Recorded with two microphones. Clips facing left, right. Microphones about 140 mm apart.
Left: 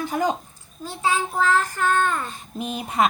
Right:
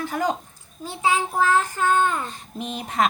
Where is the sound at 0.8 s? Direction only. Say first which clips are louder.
Right 1 dB; 15° right (ahead or behind).